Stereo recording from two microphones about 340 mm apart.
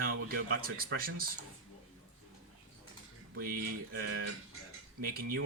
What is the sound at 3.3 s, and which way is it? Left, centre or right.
Speech, right.